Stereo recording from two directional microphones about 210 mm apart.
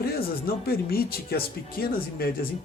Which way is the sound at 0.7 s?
45° left (ahead or behind).